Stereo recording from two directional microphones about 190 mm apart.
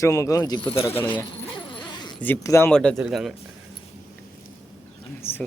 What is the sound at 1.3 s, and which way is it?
Dog, 25° left (ahead or behind).